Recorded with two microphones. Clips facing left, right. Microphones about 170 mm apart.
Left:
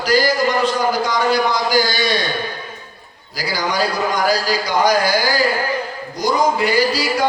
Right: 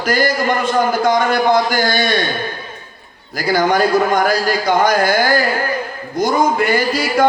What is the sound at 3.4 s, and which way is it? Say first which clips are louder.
A man's voice: right 6 dB; 50° right (ahead or behind).